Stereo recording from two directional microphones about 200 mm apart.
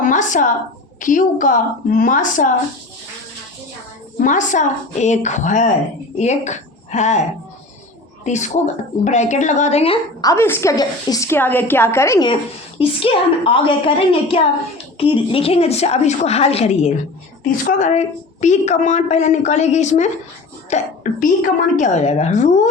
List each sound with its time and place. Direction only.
0.0 s a sound: 40° left (ahead or behind)
1.0 s a woman's voice: 40° left (ahead or behind)
4.2 s a woman's voice: 40° left (ahead or behind)